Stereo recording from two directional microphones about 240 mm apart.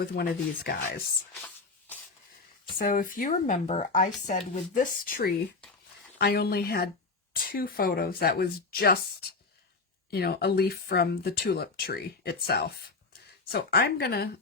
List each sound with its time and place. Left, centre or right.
0.0 s speech: left
2.7 s speech: left
10.1 s speech: left